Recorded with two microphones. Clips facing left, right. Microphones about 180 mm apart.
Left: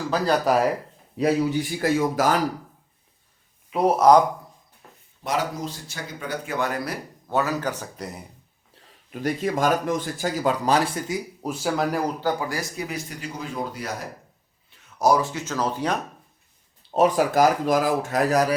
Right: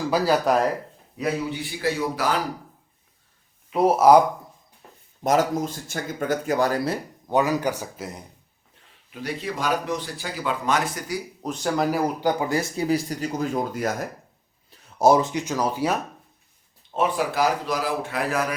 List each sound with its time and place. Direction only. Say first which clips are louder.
0.0 s speech: right 2 dB; 10° right (ahead or behind)
0.4 s speech: even; 5° left (ahead or behind)
1.2 s speech: left 5 dB; 45° left (ahead or behind)
3.7 s speech: right 1 dB; centre (ahead or behind)
5.2 s speech: right 5 dB; 45° right (ahead or behind); by 8.2 s centre (ahead or behind)
9.2 s speech: left 5 dB; 45° left (ahead or behind); by 11.2 s 30° left (ahead or behind)
11.4 s speech: right 1 dB; 5° left (ahead or behind)
12.2 s speech: right 3 dB; 20° right (ahead or behind); by 13.9 s 45° right (ahead or behind)
14.7 s speech: right 3 dB; 35° right (ahead or behind); by 16.0 s 10° right (ahead or behind)
16.9 s speech: left 5 dB; 40° left (ahead or behind)